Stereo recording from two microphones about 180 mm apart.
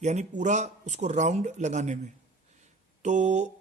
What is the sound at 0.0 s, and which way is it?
Speech, 40° right (ahead or behind).